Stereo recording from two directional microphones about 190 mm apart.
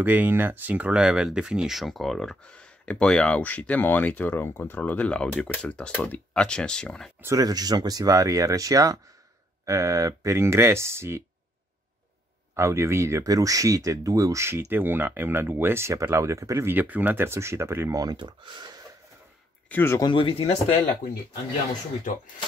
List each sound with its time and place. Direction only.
0.0 s speech: 10° right (ahead or behind)
7.2 s speech: 15° right (ahead or behind)
12.5 s speech: 15° right (ahead or behind)
19.7 s speech: 15° left (ahead or behind)
20.1 s speech: 25° left (ahead or behind)